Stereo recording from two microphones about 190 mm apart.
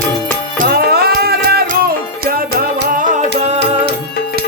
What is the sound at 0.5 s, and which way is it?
Music, 55° right (ahead or behind).